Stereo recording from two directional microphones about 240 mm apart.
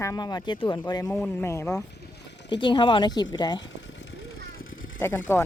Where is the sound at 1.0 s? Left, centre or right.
Centre.